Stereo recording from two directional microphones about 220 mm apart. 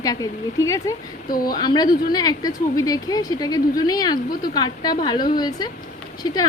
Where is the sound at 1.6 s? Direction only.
20° left (ahead or behind).